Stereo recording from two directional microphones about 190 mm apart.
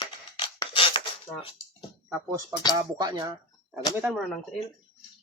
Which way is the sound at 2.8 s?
20° right (ahead or behind).